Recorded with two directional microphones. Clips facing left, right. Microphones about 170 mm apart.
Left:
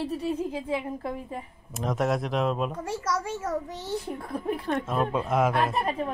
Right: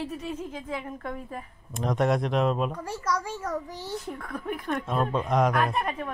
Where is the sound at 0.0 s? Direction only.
35° left (ahead or behind).